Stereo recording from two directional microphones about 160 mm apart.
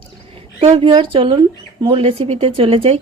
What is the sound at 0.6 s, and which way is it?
Speech, 40° right (ahead or behind).